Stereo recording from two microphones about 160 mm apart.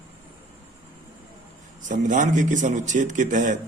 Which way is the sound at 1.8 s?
50° right (ahead or behind).